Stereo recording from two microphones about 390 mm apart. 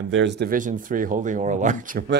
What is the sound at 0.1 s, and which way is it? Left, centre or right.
A man's voice, right.